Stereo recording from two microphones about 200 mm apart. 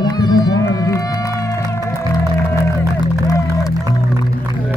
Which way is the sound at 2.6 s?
15° left (ahead or behind).